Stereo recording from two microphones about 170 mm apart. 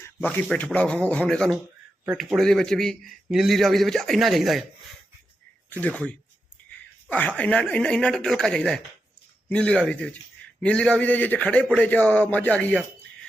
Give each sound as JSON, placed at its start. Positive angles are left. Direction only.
{"t": 0.3, "sound": "a man's voice", "side_deg": 5}
{"t": 5.7, "sound": "a man's voice", "side_deg": 5}